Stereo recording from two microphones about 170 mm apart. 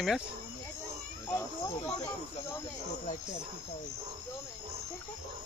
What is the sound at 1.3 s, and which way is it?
Snake, 20° left (ahead or behind).